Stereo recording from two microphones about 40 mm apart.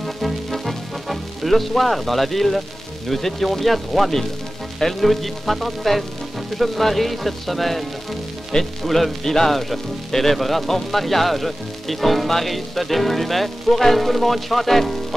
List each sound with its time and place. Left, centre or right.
0.0 s music: centre
3.1 s speech: centre